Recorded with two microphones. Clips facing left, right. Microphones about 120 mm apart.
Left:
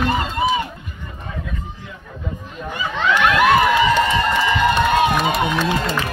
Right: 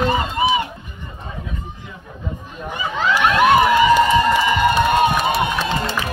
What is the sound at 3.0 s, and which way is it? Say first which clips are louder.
Crowd: even; 10° right (ahead or behind).